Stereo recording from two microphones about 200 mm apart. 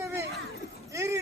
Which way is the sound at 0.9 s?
15° right (ahead or behind).